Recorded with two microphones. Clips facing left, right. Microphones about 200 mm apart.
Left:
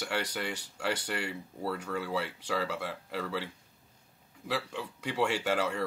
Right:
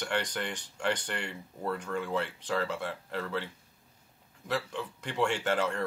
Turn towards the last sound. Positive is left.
turn(degrees=10)  # may be behind; listen again after turning